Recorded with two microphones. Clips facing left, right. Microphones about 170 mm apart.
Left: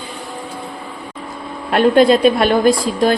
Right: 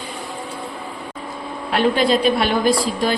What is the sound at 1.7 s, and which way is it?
A woman's voice, 50° left (ahead or behind).